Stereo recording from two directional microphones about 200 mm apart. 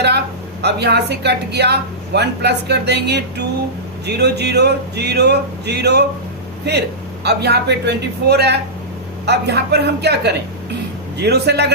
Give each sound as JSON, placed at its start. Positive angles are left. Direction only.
{"t": 0.6, "sound": "speech", "side_deg": -55}
{"t": 7.3, "sound": "speech", "side_deg": -55}